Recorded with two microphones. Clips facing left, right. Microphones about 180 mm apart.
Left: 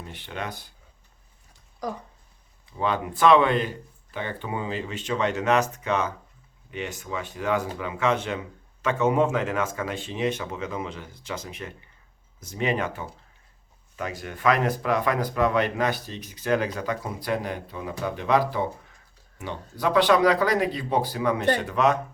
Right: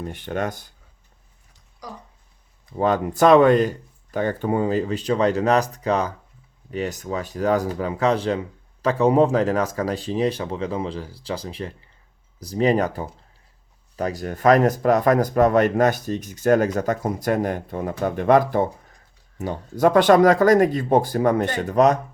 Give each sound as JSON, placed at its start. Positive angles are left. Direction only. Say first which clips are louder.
{"t": 0.0, "sound": "speech", "louder": "right 8 dB", "side_deg": -50}
{"t": 1.8, "sound": "speech", "louder": "left 6 dB", "side_deg": 50}
{"t": 2.7, "sound": "speech", "louder": "right 6 dB", "side_deg": -45}